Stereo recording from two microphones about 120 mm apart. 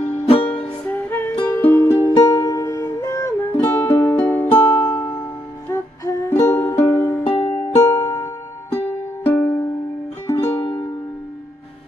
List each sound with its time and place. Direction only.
0.5 s music: 10° left (ahead or behind)
5.7 s music: 25° left (ahead or behind)